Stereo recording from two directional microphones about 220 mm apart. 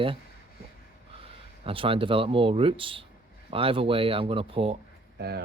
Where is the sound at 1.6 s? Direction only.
25° right (ahead or behind).